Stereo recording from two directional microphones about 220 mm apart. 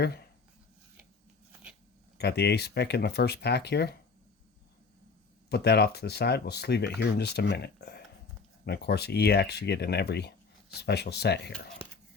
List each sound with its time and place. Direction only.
2.1 s speech: 50° left (ahead or behind)
5.5 s speech: 50° left (ahead or behind)